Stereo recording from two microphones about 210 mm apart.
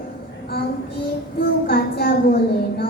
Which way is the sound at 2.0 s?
45° left (ahead or behind).